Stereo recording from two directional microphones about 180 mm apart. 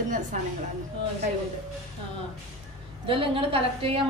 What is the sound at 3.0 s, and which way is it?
Speech, 30° right (ahead or behind).